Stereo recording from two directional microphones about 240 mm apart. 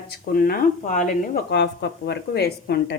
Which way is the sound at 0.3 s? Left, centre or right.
Left.